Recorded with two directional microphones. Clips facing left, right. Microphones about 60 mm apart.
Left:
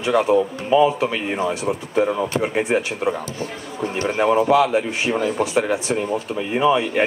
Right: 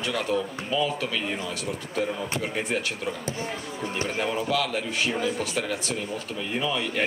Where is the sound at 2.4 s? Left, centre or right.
Left.